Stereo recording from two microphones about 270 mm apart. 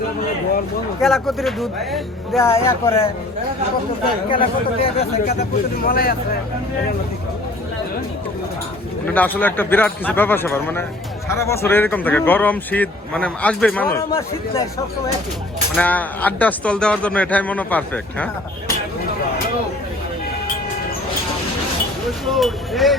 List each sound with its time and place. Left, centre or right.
1.0 s speech: centre
4.3 s speech: centre
9.0 s speech: centre
15.8 s speech: centre
22.3 s speech: centre